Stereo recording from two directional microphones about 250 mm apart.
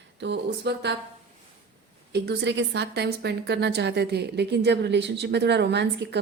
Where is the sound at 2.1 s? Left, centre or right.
Right.